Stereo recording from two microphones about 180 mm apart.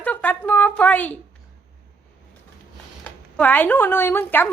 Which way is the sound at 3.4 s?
10° left (ahead or behind).